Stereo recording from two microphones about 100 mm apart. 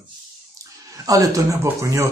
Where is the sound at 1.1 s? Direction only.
35° right (ahead or behind).